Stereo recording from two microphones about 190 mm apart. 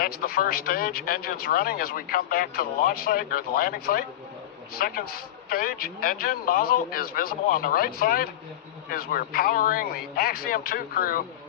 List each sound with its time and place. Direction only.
0.0 s speech: 50° left (ahead or behind)